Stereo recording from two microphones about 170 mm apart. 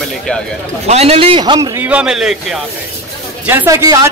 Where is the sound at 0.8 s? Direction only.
40° right (ahead or behind); by 2.6 s centre (ahead or behind).